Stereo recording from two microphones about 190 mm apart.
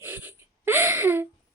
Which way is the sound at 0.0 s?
10° right (ahead or behind).